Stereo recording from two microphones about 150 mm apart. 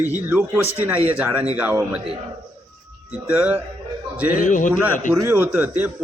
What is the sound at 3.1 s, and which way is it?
A man's voice, 10° right (ahead or behind).